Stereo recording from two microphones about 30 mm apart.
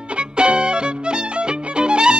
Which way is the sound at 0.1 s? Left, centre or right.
Right.